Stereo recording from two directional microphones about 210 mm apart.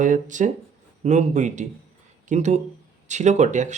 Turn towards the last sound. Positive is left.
turn(degrees=-35)  # may be behind; listen again after turning